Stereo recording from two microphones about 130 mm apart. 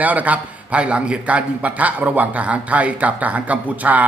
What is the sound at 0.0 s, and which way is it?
A man's voice, 10° right (ahead or behind).